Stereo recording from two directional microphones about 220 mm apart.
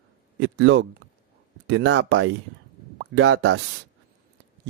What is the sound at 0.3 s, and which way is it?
Speech, 60° right (ahead or behind).